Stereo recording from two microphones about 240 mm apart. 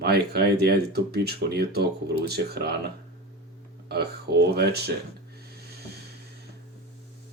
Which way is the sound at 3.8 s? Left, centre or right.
Right.